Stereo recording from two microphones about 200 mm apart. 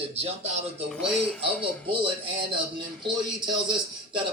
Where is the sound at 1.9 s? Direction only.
25° right (ahead or behind).